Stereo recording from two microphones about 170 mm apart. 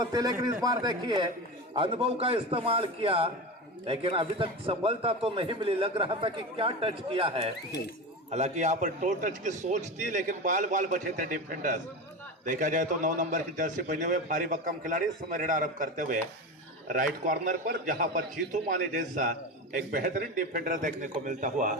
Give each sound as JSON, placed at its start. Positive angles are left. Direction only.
{"t": 0.0, "sound": "a man's voice", "side_deg": -20}